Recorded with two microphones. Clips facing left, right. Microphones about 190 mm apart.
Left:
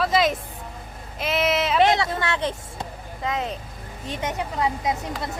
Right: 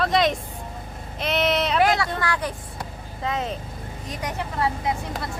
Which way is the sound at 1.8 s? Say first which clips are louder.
Left 1 dB; 20° left (ahead or behind).